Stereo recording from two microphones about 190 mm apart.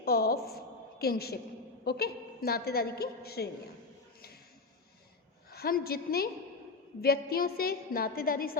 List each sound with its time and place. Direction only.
0.0 s a sound: 55° left (ahead or behind)
0.9 s a woman's voice: 55° left (ahead or behind)
5.5 s a woman's voice: 55° left (ahead or behind)